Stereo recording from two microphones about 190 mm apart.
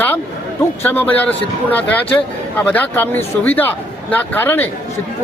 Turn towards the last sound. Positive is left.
turn(degrees=10)  # may be behind; listen again after turning